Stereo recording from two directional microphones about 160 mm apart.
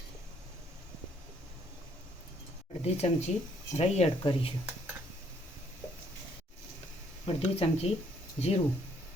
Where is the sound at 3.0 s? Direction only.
40° left (ahead or behind).